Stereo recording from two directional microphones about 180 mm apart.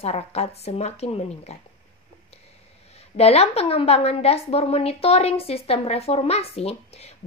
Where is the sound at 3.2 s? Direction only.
35° left (ahead or behind).